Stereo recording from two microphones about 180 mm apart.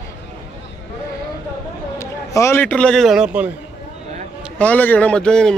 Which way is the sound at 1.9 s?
15° left (ahead or behind).